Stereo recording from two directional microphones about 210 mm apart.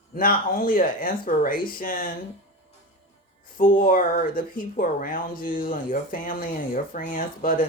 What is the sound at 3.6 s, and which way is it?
A woman's voice, 40° left (ahead or behind).